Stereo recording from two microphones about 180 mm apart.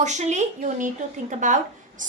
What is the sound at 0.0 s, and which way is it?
A woman's voice, 40° right (ahead or behind).